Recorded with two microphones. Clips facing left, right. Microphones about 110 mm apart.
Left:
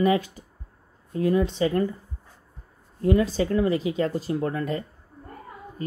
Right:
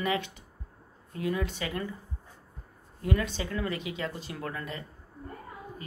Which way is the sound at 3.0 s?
35° left (ahead or behind).